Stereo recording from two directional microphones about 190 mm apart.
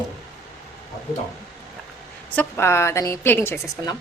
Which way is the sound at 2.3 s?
10° left (ahead or behind).